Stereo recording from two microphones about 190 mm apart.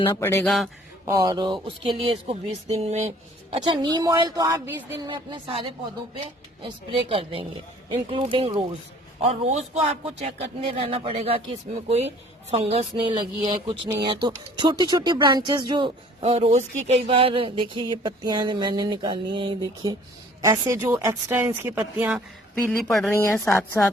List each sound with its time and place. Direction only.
0.1 s speech: 15° left (ahead or behind)
0.4 s speech: centre (ahead or behind)
1.0 s speech: 15° right (ahead or behind); by 3.1 s 35° right (ahead or behind)
3.5 s speech: 25° right (ahead or behind)
5.0 s speech: 25° right (ahead or behind)
12.5 s speech: 30° right (ahead or behind); by 22.2 s 10° right (ahead or behind)
22.7 s speech: centre (ahead or behind)
23.1 s speech: 15° left (ahead or behind)